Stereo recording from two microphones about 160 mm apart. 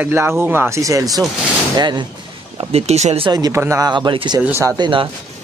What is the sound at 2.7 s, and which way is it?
Speech, 45° right (ahead or behind).